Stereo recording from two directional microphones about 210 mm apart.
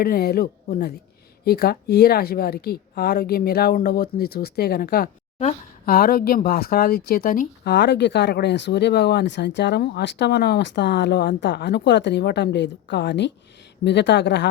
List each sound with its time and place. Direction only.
0.0 s speech: 45° left (ahead or behind)